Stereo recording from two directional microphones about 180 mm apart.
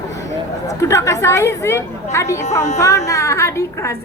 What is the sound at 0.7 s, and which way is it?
A woman's voice, 15° left (ahead or behind).